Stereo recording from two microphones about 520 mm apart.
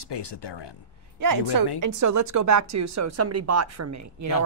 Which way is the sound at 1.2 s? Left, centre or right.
Right.